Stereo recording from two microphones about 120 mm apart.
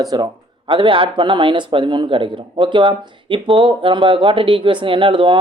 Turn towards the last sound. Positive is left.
turn(degrees=-45)  # may be behind; listen again after turning